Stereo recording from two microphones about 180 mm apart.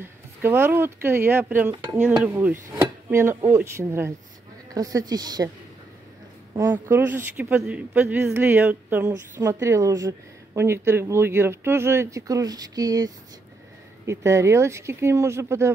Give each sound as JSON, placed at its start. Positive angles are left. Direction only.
{"t": 0.0, "sound": "a woman's voice", "side_deg": -15}
{"t": 6.6, "sound": "speech", "side_deg": -10}